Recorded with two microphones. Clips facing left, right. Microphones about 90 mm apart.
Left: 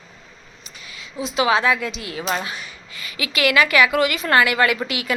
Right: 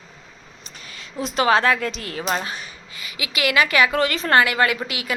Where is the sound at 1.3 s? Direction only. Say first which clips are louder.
Right 1 dB; 45° right (ahead or behind).